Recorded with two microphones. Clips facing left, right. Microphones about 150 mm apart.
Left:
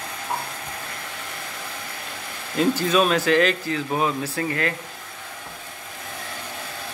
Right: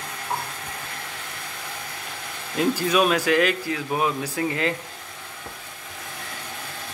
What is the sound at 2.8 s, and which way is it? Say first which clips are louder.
Speech: left 1 dB; 10° right (ahead or behind).